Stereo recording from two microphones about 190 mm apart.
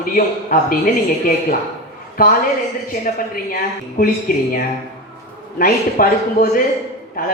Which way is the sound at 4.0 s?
50° left (ahead or behind).